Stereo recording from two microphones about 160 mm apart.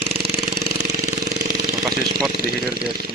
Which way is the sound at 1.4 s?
65° right (ahead or behind).